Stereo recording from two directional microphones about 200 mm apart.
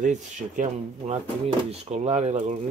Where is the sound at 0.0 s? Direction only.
40° right (ahead or behind).